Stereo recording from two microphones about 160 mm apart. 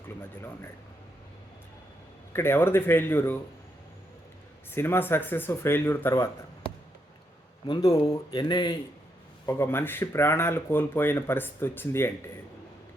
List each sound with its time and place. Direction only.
2.3 s speech: 15° left (ahead or behind)
4.7 s speech: 15° left (ahead or behind)
7.7 s speech: 20° left (ahead or behind)
9.5 s speech: 15° left (ahead or behind)